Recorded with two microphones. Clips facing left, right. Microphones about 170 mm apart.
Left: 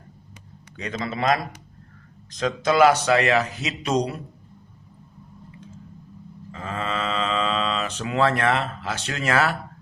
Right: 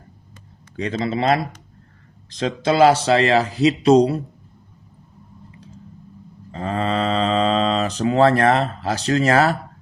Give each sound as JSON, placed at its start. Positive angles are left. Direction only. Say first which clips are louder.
{"t": 0.8, "sound": "speech", "louder": "right 5 dB", "side_deg": -30}
{"t": 6.5, "sound": "speech", "louder": "right 7 dB", "side_deg": -35}